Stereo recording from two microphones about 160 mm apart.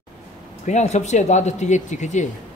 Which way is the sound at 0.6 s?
45° left (ahead or behind).